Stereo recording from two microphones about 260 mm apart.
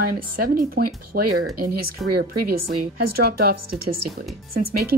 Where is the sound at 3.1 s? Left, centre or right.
Right.